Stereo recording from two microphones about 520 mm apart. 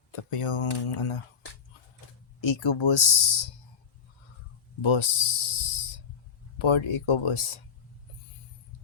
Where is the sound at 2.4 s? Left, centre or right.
Left.